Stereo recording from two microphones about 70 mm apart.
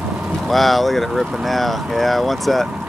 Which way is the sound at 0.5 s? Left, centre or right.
Centre.